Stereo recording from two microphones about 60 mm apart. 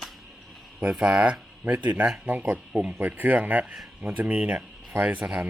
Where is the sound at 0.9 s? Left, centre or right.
Centre.